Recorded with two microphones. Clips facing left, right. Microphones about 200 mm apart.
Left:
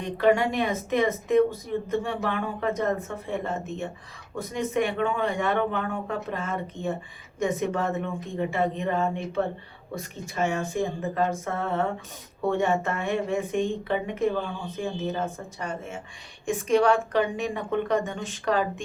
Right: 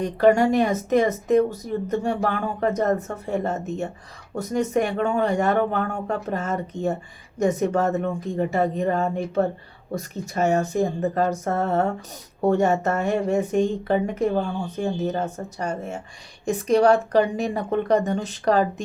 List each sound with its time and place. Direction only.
0.0 s speech: 45° right (ahead or behind)